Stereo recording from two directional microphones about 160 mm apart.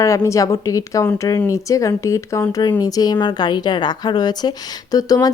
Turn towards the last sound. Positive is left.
turn(degrees=25)  # may be behind; listen again after turning